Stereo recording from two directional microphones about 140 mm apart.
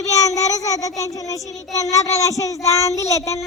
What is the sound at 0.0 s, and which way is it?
Speech, 25° left (ahead or behind).